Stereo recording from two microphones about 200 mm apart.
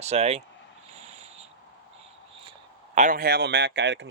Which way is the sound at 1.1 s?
30° right (ahead or behind).